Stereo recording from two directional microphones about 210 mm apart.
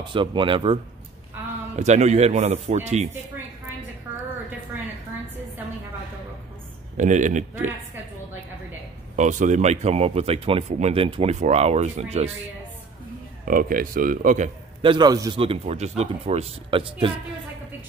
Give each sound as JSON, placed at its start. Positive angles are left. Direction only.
{"t": 0.1, "sound": "speech", "side_deg": -25}
{"t": 1.8, "sound": "speech", "side_deg": -35}
{"t": 7.0, "sound": "speech", "side_deg": -35}
{"t": 9.1, "sound": "speech", "side_deg": -35}
{"t": 13.5, "sound": "speech", "side_deg": -40}
{"t": 14.8, "sound": "speech", "side_deg": -20}